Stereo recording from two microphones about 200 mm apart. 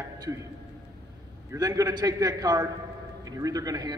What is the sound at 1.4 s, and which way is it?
A man's voice, 15° right (ahead or behind).